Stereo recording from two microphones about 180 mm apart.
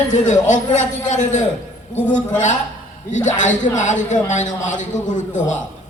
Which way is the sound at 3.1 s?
45° left (ahead or behind).